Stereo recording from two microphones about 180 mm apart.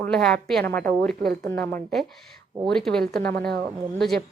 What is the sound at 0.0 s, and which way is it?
A woman's voice, 5° left (ahead or behind).